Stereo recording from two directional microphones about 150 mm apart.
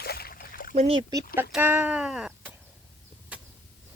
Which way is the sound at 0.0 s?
90° left.